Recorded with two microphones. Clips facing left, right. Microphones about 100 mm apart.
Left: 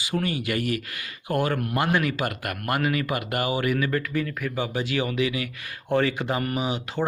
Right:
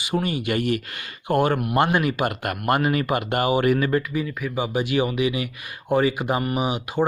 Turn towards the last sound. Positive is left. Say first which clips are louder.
# right 4 dB
turn(degrees=-15)  # may be behind; listen again after turning